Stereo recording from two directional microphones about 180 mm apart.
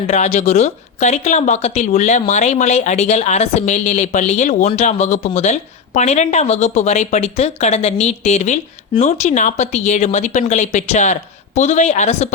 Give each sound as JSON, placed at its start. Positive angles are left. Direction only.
{"t": 0.1, "sound": "speech", "side_deg": 40}